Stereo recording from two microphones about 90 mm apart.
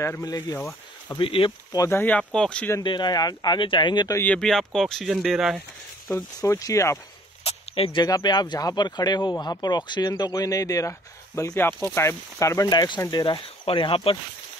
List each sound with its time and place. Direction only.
1.2 s speech: 90° left
1.9 s speech: 25° left (ahead or behind)
2.1 s speech: 10° left (ahead or behind)
2.8 s speech: 55° left (ahead or behind)
4.4 s speech: 5° left (ahead or behind)
6.1 s speech: 35° left (ahead or behind)
7.4 s speech: 90° left
8.0 s speech: 50° left (ahead or behind); by 12.6 s 35° left (ahead or behind)
12.6 s speech: 50° left (ahead or behind); by 14.1 s 75° left (ahead or behind)